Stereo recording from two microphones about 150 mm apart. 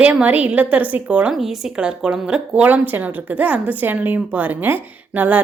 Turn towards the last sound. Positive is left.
turn(degrees=-10)  # may be behind; listen again after turning